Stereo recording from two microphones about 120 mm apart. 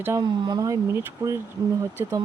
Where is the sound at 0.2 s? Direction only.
40° right (ahead or behind).